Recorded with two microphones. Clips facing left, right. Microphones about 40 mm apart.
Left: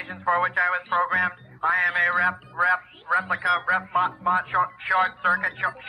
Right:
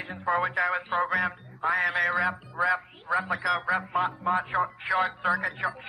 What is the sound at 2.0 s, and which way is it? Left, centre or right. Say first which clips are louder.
Speech: left 4 dB; centre.